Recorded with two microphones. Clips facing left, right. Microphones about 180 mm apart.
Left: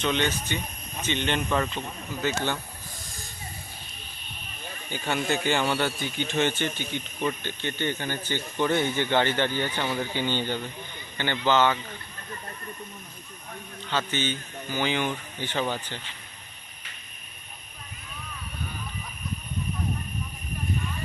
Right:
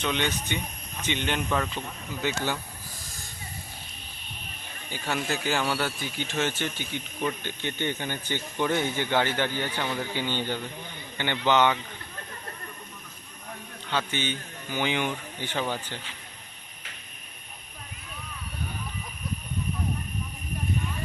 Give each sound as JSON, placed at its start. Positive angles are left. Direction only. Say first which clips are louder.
{"t": 0.0, "sound": "speech", "louder": "left 2 dB", "side_deg": -10}
{"t": 4.9, "sound": "speech", "louder": "left 3 dB", "side_deg": 0}
{"t": 9.8, "sound": "speech", "louder": "left 2 dB", "side_deg": 10}
{"t": 10.2, "sound": "speech", "louder": "left 2 dB", "side_deg": -10}
{"t": 13.9, "sound": "speech", "louder": "left 1 dB", "side_deg": -15}